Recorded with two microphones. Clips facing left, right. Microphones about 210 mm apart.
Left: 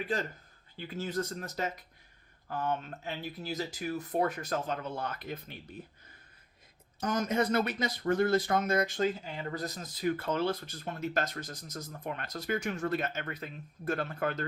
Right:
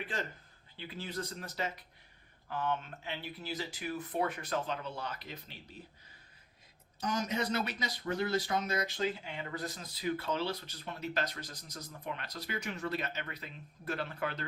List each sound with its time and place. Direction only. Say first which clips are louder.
0.8 s speech: left 6 dB; 45° left (ahead or behind)
7.0 s speech: left 5 dB; 50° left (ahead or behind)